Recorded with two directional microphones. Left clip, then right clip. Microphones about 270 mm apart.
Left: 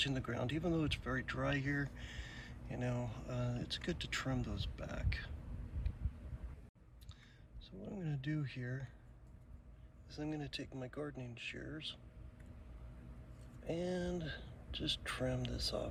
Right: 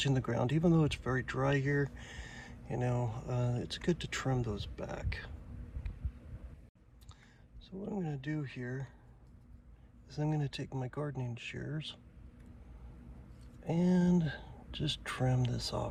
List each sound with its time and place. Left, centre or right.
0.0 s speech: centre
7.9 s speech: centre
10.1 s speech: centre
13.7 s speech: centre